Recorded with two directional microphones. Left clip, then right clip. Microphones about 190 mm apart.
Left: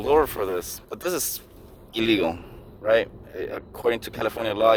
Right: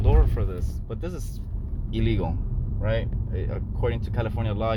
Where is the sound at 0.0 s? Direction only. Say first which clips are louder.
Left 9 dB; 50° left (ahead or behind).